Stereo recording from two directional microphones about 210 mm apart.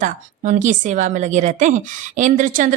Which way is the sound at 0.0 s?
35° right (ahead or behind).